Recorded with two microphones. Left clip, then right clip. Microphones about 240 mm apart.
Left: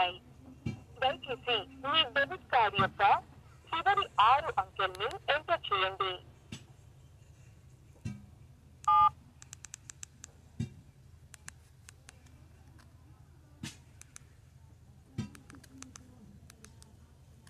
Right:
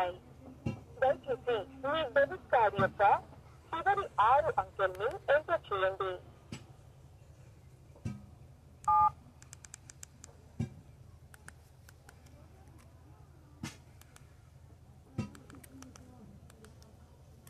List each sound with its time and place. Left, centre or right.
0.9 s telephone: centre
3.7 s speech: left
8.8 s telephone dialing: left